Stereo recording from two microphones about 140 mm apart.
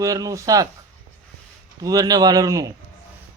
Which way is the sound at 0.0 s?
25° right (ahead or behind).